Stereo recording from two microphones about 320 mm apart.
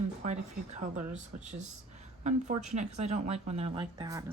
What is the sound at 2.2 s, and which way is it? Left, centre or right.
A woman's voice, right.